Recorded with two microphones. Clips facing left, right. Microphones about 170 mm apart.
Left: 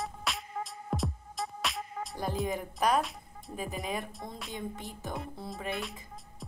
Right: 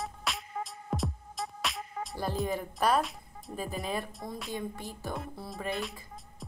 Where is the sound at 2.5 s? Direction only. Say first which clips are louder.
Right 1 dB; 15° left (ahead or behind).